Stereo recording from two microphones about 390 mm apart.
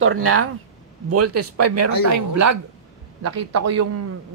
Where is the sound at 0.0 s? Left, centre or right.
Right.